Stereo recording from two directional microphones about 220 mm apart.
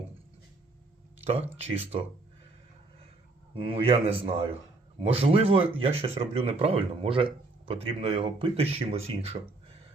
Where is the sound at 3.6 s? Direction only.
25° right (ahead or behind).